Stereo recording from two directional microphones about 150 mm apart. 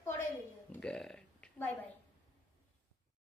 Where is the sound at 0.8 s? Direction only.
5° left (ahead or behind).